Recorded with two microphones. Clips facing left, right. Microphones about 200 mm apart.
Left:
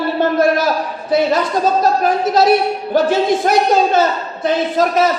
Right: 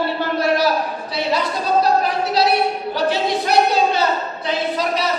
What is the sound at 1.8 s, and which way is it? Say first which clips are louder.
A man's voice: left 3 dB; 45° left (ahead or behind).